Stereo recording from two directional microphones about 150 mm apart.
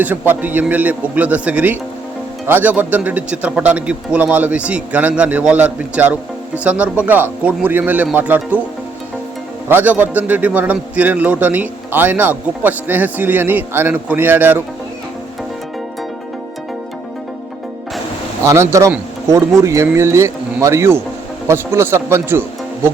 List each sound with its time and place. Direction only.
0.0 s a man's voice: 10° right (ahead or behind)
9.6 s a man's voice: 10° right (ahead or behind)
18.4 s speech: 20° right (ahead or behind)